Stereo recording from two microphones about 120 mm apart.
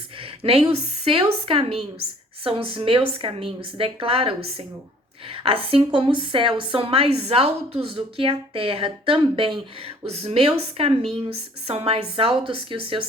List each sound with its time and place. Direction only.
0.2 s a woman's voice: 50° right (ahead or behind)
10.1 s a woman's voice: 60° right (ahead or behind)